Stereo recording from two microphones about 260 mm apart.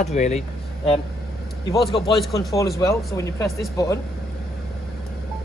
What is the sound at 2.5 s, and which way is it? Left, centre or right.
A man's voice, centre.